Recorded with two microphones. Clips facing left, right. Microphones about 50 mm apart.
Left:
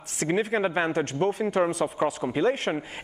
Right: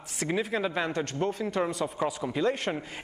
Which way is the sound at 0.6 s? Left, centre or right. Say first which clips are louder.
Left 4 dB; left.